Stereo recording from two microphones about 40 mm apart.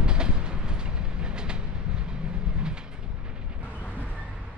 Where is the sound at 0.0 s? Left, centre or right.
Right.